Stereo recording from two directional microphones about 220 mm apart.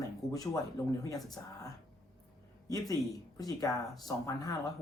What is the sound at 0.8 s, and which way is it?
Speech, 15° left (ahead or behind).